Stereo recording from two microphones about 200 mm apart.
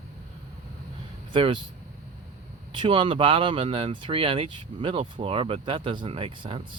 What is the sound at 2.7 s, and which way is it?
Speech, 25° right (ahead or behind).